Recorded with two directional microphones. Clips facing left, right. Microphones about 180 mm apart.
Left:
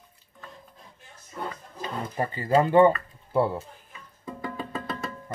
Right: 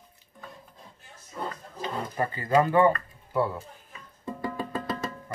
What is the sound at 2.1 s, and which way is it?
Speech, 25° left (ahead or behind).